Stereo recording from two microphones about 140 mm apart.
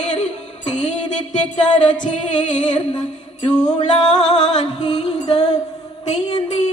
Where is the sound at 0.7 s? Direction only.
55° left (ahead or behind).